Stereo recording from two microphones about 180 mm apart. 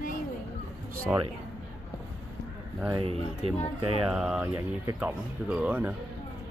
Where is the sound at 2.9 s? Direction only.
30° right (ahead or behind).